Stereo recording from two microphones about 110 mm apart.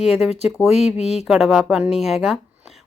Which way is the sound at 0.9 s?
80° left.